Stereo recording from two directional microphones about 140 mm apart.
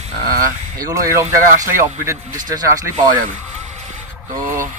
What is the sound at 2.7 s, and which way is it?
Speech, 20° right (ahead or behind).